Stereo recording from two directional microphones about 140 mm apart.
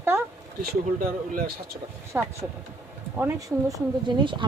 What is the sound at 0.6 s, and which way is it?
Speech, 80° right.